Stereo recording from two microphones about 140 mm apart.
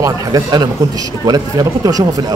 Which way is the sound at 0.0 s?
30° right (ahead or behind).